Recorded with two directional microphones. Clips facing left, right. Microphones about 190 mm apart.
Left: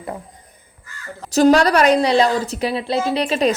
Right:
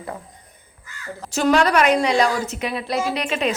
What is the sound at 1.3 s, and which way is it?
A woman's voice, 35° left (ahead or behind).